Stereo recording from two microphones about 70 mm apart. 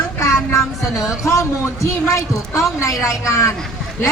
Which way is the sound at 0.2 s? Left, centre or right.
Left.